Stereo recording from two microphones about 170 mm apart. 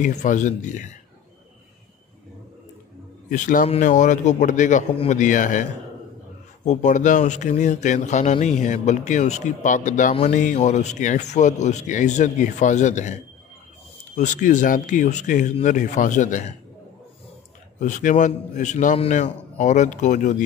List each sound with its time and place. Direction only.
0.0 s a man's voice: 45° left (ahead or behind)
3.3 s a man's voice: 50° left (ahead or behind)
17.7 s a man's voice: 45° left (ahead or behind)